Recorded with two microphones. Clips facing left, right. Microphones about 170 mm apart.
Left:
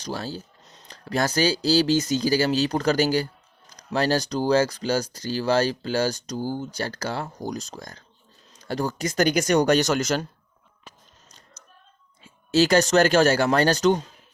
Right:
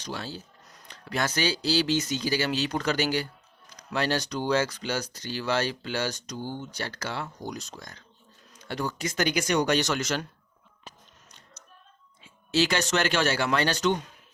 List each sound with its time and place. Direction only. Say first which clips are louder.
0.0 s speech: left 5 dB; 40° left (ahead or behind)
0.6 s a sound: left 2 dB; 25° left (ahead or behind)
0.9 s speech: left 5 dB; 35° left (ahead or behind)
11.3 s music: left 2 dB; 40° left (ahead or behind)
12.2 s speech: left 5 dB; 45° left (ahead or behind)